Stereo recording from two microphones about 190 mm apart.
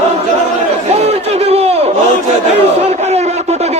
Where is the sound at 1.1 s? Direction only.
35° right (ahead or behind).